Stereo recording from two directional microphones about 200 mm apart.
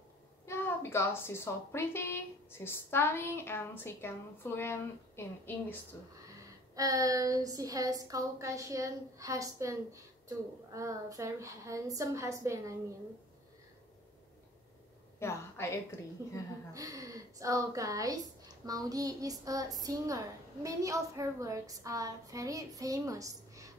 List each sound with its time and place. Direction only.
0.5 s a woman's voice: 10° left (ahead or behind)
6.7 s a woman's voice: 15° right (ahead or behind)
15.1 s a woman's voice: 15° left (ahead or behind)
16.7 s a woman's voice: 15° right (ahead or behind)